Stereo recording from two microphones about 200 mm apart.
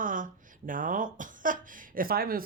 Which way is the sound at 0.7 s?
40° right (ahead or behind).